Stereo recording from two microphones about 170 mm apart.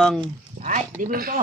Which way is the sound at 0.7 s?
55° right (ahead or behind).